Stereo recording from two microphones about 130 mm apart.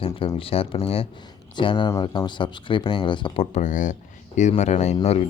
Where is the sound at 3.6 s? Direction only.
80° left.